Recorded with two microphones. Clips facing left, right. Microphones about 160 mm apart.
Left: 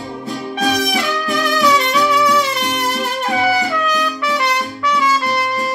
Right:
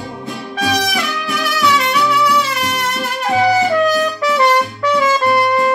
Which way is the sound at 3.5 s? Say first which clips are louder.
Right 5 dB; 45° right (ahead or behind).